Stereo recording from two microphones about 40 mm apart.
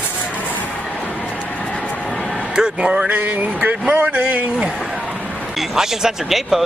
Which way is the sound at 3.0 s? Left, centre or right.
Right.